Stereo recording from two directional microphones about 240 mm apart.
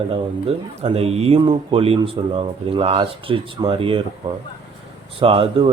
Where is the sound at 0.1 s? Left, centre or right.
Right.